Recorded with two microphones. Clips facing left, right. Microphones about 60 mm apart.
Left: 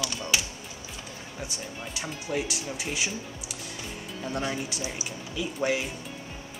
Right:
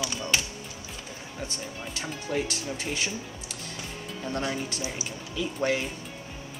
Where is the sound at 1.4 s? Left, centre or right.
Centre.